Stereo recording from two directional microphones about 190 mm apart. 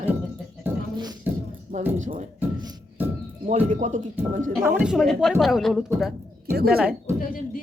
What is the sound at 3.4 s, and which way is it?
Speech, 40° right (ahead or behind).